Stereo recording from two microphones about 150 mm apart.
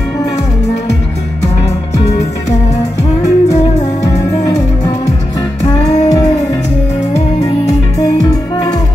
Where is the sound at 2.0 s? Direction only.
50° left (ahead or behind).